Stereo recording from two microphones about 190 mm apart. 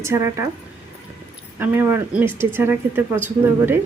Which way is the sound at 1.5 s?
10° right (ahead or behind).